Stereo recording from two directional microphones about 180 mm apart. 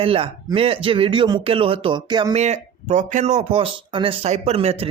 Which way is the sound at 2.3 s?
40° right (ahead or behind).